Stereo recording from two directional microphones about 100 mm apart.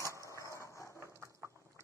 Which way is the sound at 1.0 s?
30° right (ahead or behind).